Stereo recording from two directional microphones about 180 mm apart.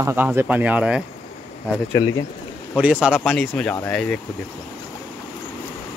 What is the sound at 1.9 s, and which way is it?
Speech, 20° left (ahead or behind).